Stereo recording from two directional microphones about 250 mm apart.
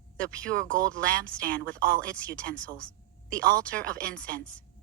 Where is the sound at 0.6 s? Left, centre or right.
Right.